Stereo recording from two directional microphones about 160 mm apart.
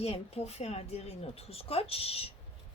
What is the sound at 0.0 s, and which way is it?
Speech, 40° left (ahead or behind).